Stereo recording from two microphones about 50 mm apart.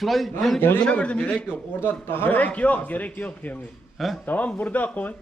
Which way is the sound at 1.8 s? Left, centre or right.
Left.